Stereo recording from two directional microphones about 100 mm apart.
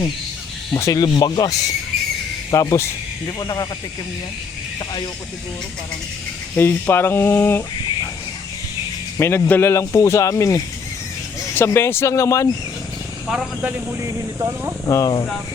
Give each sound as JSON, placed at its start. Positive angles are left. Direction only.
{"t": 0.7, "sound": "speech", "side_deg": 35}
{"t": 6.6, "sound": "speech", "side_deg": 20}
{"t": 9.1, "sound": "speech", "side_deg": 25}
{"t": 13.2, "sound": "speech", "side_deg": -5}
{"t": 13.7, "sound": "speech", "side_deg": -30}
{"t": 14.8, "sound": "speech", "side_deg": 35}